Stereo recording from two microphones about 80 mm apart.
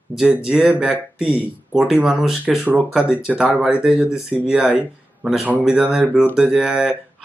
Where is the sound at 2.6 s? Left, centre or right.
Right.